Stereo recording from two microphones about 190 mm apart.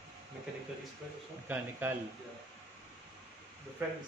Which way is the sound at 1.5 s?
10° right (ahead or behind).